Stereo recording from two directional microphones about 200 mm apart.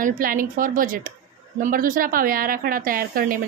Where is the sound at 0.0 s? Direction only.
45° right (ahead or behind).